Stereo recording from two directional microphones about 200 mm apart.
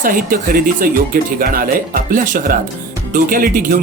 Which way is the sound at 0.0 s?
45° right (ahead or behind).